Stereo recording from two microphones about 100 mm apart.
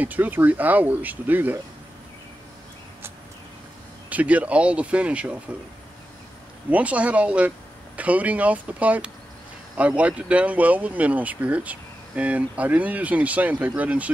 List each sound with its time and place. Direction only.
0.0 s speech: 15° right (ahead or behind)
4.1 s speech: 15° right (ahead or behind)
6.7 s speech: 15° right (ahead or behind)